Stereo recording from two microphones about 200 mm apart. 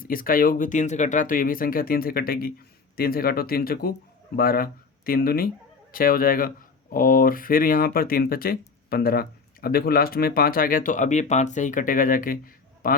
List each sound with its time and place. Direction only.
0.0 s speech: 45° left (ahead or behind)